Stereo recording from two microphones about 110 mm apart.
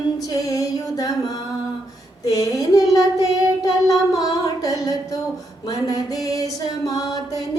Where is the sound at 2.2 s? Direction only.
35° left (ahead or behind).